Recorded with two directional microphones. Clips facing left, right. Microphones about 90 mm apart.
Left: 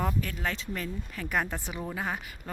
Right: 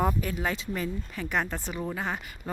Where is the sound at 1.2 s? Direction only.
5° left (ahead or behind).